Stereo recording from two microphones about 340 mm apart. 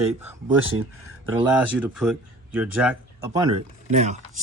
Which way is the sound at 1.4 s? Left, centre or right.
Centre.